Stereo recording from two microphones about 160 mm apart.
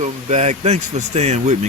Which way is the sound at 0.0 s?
45° right (ahead or behind).